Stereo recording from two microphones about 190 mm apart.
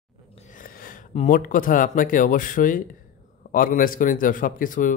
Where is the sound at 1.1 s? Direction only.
40° left (ahead or behind).